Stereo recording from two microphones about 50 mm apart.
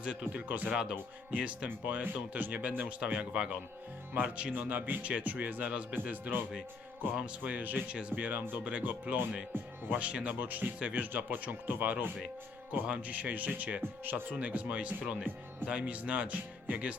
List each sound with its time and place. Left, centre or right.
0.0 s speech: right
1.8 s speech: right
3.3 s speech: centre
4.7 s speech: right
7.1 s speech: right
9.9 s speech: right
10.3 s speech: right
10.8 s speech: right
11.0 s speech: right
14.0 s speech: right
14.3 s speech: right